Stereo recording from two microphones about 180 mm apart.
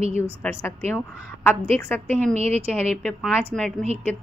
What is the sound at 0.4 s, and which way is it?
A woman's voice, 10° left (ahead or behind).